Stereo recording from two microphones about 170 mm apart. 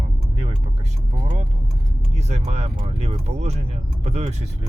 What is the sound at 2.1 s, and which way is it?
Speech, 40° right (ahead or behind).